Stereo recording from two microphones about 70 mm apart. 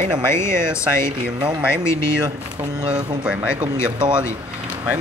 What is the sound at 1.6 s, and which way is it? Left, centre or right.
Speech, centre.